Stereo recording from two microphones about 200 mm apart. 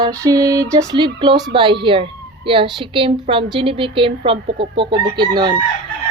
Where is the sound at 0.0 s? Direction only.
15° right (ahead or behind).